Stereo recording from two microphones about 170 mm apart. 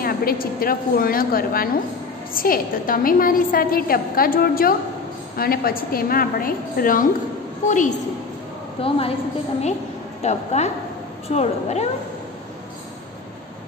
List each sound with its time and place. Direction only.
0.0 s a woman's voice: 60° left (ahead or behind)
8.8 s a woman's voice: 35° left (ahead or behind)
10.2 s a woman's voice: 40° left (ahead or behind)